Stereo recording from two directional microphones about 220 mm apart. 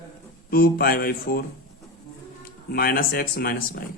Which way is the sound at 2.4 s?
40° left (ahead or behind).